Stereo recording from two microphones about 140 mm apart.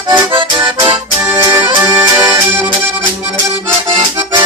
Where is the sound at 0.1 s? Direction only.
35° right (ahead or behind).